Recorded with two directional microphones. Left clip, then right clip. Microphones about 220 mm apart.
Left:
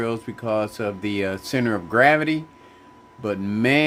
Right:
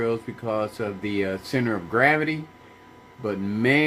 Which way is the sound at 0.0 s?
50° left (ahead or behind).